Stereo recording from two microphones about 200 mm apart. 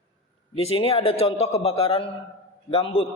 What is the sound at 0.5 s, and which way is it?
A man's voice, 30° left (ahead or behind).